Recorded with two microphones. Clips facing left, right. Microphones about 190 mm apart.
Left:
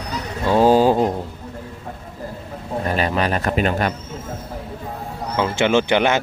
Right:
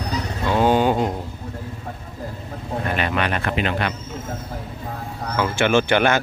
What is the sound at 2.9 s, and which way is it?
Speech, 35° left (ahead or behind).